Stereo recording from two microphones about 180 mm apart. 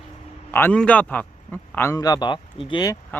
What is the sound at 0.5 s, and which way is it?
A man's voice, 10° left (ahead or behind).